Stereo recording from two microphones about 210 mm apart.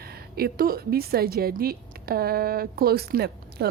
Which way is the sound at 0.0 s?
45° right (ahead or behind).